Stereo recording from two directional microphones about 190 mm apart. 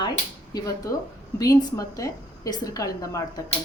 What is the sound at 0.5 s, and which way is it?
A child's voice, 20° left (ahead or behind).